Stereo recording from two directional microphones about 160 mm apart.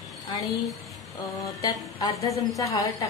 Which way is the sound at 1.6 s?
25° left (ahead or behind).